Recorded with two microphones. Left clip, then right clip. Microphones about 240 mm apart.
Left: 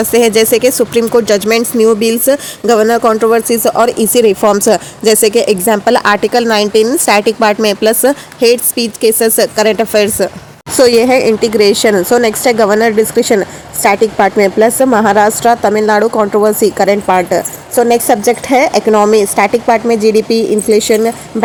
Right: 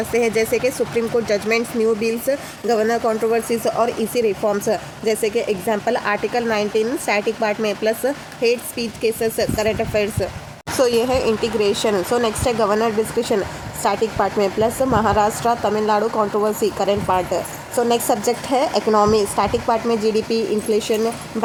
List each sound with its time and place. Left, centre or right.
0.0 s speech: left
18.6 s speech: centre
19.4 s speech: left
19.9 s speech: centre
20.7 s speech: left